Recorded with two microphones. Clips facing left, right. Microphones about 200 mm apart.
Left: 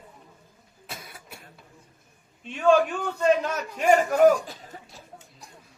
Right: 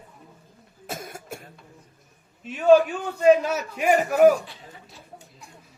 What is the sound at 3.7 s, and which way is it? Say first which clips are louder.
Speech: left 1 dB; 10° right (ahead or behind).